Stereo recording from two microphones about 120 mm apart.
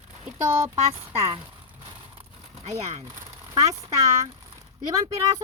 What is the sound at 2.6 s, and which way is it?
Speech, 65° right (ahead or behind).